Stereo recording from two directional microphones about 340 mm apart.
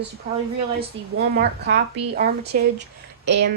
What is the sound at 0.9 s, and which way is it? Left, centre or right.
Speech, centre.